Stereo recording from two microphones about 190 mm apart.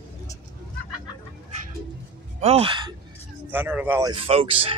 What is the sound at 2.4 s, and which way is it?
Speech, 30° right (ahead or behind).